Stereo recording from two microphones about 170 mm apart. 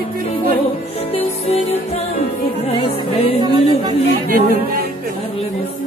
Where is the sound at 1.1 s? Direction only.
35° left (ahead or behind).